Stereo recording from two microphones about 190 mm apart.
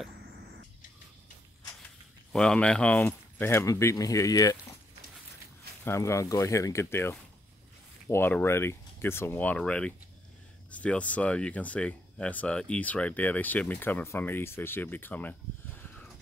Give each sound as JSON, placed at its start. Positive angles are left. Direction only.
{"t": 2.3, "sound": "speech", "side_deg": 5}
{"t": 5.9, "sound": "speech", "side_deg": 15}